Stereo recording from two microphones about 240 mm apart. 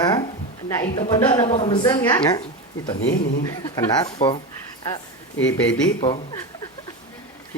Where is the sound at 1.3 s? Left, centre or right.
Centre.